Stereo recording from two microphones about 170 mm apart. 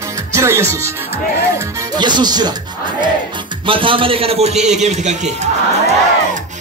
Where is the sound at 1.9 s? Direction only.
25° right (ahead or behind).